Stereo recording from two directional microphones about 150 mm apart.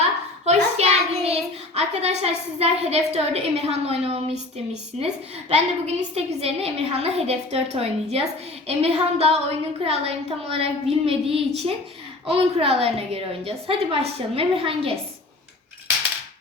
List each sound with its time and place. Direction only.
0.4 s a child's voice: 45° right (ahead or behind)